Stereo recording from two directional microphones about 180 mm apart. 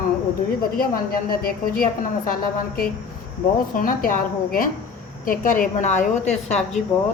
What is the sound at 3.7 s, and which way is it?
A woman's voice, 50° left (ahead or behind).